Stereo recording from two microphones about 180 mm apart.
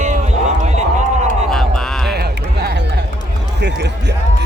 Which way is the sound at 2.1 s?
60° right (ahead or behind).